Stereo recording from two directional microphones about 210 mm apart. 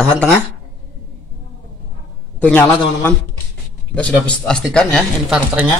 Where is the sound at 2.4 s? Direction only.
10° left (ahead or behind).